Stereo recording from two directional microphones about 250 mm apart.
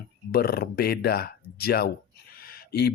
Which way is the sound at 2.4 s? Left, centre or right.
Left.